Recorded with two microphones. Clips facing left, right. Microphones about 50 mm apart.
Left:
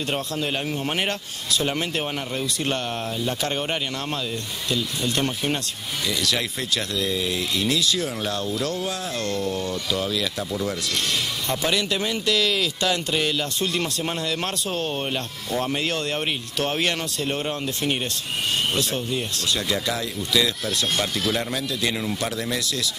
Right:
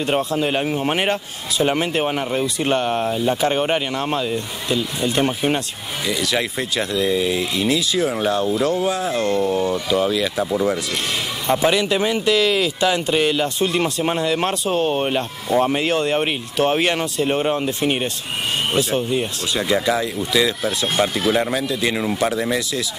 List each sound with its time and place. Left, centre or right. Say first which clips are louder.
0.0 s speech: right 7 dB; centre